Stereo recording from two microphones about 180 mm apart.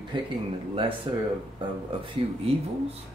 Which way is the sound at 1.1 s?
25° right (ahead or behind).